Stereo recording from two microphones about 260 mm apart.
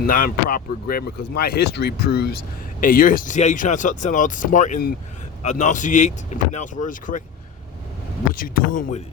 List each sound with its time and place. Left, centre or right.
0.0 s speech: left
8.3 s speech: left